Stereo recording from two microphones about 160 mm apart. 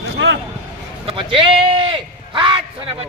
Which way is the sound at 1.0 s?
35° right (ahead or behind).